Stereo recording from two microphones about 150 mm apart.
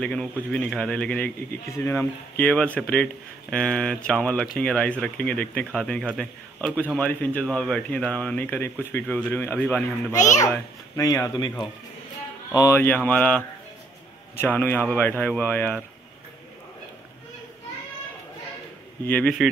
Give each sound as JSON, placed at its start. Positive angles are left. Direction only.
{"t": 0.0, "sound": "speech", "side_deg": 5}
{"t": 10.4, "sound": "speech", "side_deg": 20}
{"t": 12.5, "sound": "speech", "side_deg": 20}
{"t": 19.0, "sound": "speech", "side_deg": 10}